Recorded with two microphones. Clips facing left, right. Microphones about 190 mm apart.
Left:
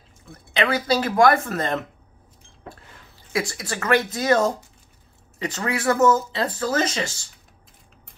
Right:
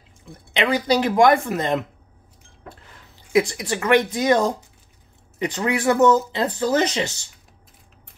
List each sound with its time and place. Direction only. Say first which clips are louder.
0.3 s speech: right 1 dB; 20° right (ahead or behind)
3.3 s speech: right 7 dB; 20° right (ahead or behind)